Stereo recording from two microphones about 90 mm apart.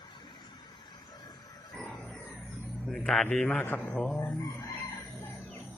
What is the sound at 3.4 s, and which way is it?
Speech, 20° left (ahead or behind).